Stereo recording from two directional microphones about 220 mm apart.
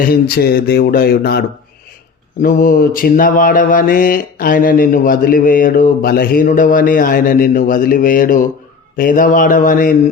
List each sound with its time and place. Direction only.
0.0 s speech: 45° left (ahead or behind)
2.4 s mantra: 40° left (ahead or behind)